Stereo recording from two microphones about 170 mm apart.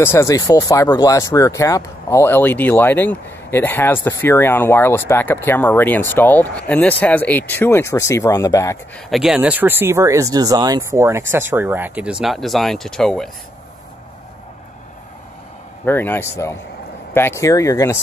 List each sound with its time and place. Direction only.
0.0 s speech: 15° left (ahead or behind)
9.1 s speech: 5° right (ahead or behind)
15.8 s speech: 10° left (ahead or behind)